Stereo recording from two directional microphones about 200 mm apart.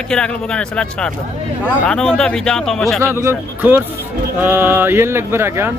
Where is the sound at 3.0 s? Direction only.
15° right (ahead or behind).